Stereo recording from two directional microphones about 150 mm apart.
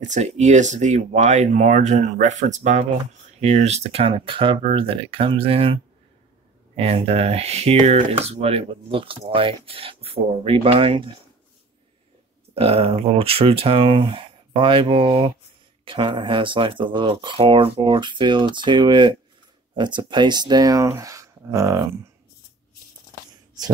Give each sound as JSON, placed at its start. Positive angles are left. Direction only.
{"t": 0.0, "sound": "speech", "side_deg": -55}
{"t": 6.8, "sound": "speech", "side_deg": -40}
{"t": 12.5, "sound": "speech", "side_deg": -40}